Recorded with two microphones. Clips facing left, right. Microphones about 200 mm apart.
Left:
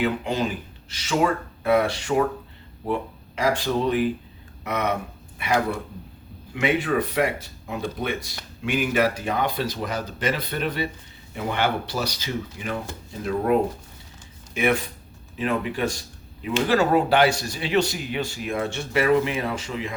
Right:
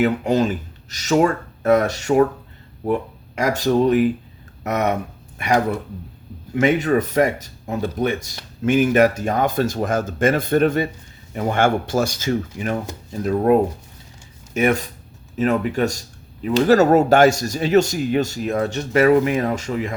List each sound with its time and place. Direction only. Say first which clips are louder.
0.0 s speech: right 6 dB; 45° right (ahead or behind)
6.6 s speech: right 5 dB; 40° right (ahead or behind)